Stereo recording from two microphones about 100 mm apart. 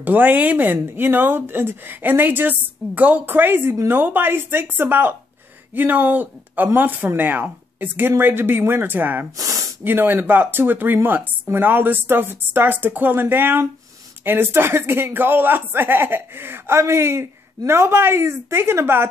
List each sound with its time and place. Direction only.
0.0 s speech: 15° right (ahead or behind)